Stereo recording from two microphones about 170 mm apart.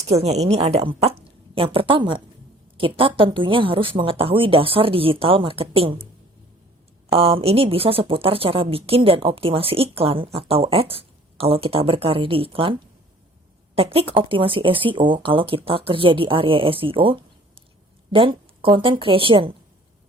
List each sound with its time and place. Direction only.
0.0 s a woman's voice: 40° right (ahead or behind)
7.1 s speech: 35° right (ahead or behind)
13.7 s speech: 35° right (ahead or behind)